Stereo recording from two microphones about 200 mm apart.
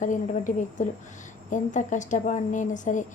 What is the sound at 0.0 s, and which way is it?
A woman's voice, 40° left (ahead or behind).